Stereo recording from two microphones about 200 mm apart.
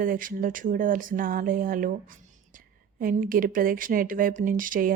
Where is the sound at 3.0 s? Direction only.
45° right (ahead or behind).